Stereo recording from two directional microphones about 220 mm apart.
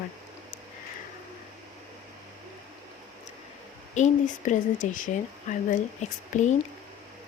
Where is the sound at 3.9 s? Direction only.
35° left (ahead or behind).